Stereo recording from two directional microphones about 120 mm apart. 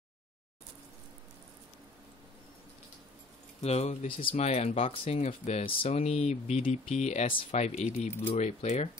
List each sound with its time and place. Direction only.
3.6 s speech: 65° left (ahead or behind)
4.2 s speech: 45° left (ahead or behind)
4.5 s speech: 65° left (ahead or behind)
5.2 s speech: 65° left (ahead or behind)